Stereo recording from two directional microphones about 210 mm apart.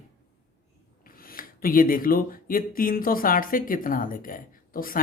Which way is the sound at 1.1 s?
45° left (ahead or behind).